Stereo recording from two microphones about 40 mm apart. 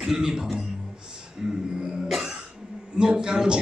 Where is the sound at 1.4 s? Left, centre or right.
Right.